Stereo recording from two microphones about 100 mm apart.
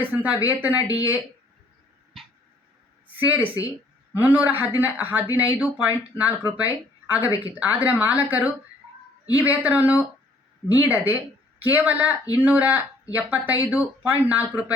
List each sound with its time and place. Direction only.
0.0 s speech: 15° right (ahead or behind)
3.2 s speech: 20° right (ahead or behind)